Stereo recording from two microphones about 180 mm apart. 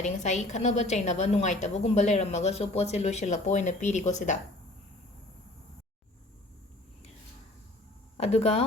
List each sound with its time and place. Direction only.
0.0 s a woman's voice: 40° left (ahead or behind)
8.2 s a woman's voice: 35° left (ahead or behind)